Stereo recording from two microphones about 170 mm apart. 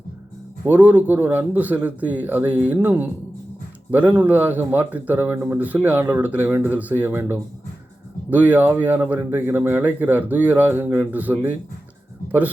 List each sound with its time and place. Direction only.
0.6 s a man's voice: 10° right (ahead or behind)